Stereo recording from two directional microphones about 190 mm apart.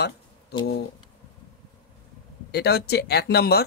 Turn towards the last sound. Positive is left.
turn(degrees=55)  # may be behind; listen again after turning